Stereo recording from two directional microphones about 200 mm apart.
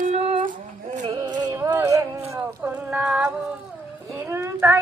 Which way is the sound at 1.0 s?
20° right (ahead or behind).